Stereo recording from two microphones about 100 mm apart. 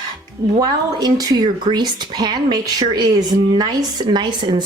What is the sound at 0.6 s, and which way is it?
Speech, 40° right (ahead or behind).